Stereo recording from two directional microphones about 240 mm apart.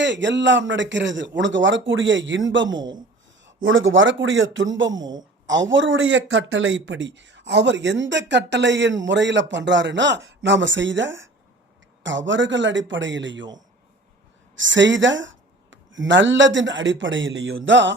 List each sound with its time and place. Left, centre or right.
0.0 s speech: right
14.5 s speech: right